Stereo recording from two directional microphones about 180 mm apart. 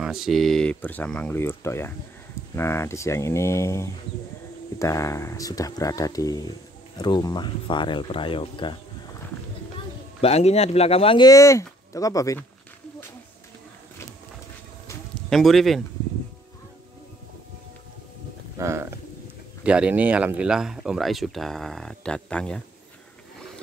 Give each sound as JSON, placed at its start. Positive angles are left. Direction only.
{"t": 0.0, "sound": "speech", "side_deg": 0}
{"t": 10.2, "sound": "speech", "side_deg": 35}
{"t": 15.1, "sound": "speech", "side_deg": 0}
{"t": 18.6, "sound": "a sound", "side_deg": -15}
{"t": 19.6, "sound": "speech", "side_deg": -5}